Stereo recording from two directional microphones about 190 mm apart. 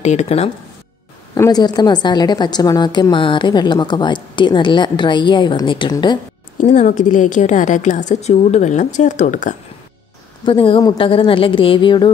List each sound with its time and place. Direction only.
0.0 s a woman's voice: 35° left (ahead or behind)
1.3 s a woman's voice: 20° left (ahead or behind)
6.6 s a woman's voice: 40° left (ahead or behind)
10.4 s a woman's voice: 25° left (ahead or behind)